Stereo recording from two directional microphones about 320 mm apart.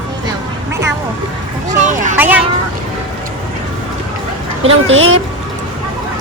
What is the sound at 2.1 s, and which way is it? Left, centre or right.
Speech, centre.